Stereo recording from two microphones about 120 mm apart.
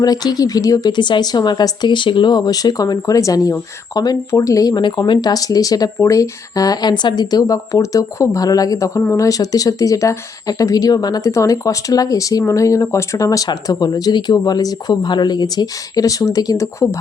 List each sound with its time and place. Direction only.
0.0 s a woman's voice: 35° left (ahead or behind)